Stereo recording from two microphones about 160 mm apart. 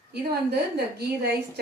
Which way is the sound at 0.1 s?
85° right.